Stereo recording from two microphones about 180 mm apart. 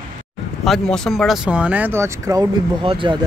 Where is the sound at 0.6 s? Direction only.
Centre (ahead or behind); by 2.4 s 15° right (ahead or behind).